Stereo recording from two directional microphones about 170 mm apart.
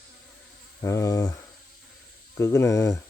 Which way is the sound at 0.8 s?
20° left (ahead or behind).